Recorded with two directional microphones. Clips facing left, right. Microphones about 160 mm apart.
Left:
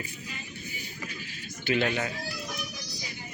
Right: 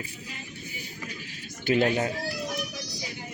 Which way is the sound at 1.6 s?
40° right (ahead or behind).